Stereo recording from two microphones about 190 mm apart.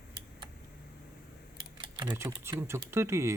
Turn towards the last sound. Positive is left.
turn(degrees=-15)  # may be behind; listen again after turning